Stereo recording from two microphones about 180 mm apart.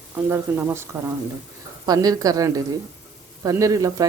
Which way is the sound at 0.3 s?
15° right (ahead or behind).